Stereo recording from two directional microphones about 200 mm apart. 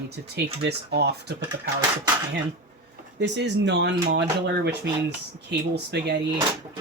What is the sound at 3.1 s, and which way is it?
Speech, 60° right (ahead or behind).